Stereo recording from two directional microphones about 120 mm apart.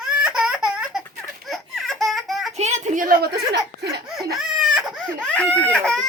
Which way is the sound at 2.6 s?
70° right (ahead or behind).